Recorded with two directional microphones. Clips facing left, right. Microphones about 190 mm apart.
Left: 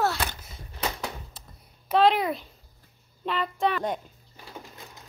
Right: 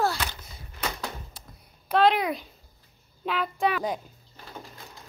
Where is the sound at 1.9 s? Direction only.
Centre (ahead or behind).